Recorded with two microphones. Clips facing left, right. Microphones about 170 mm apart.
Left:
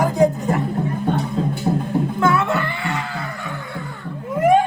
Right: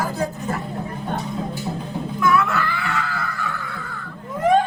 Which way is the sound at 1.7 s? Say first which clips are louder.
Left 8 dB; 60° left (ahead or behind).